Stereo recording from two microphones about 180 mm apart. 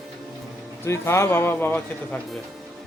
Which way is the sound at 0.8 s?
15° left (ahead or behind).